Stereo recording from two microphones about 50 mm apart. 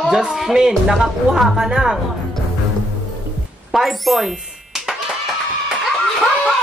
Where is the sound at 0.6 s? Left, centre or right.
Centre.